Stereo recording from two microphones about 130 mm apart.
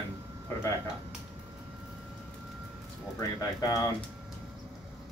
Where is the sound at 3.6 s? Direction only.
30° left (ahead or behind).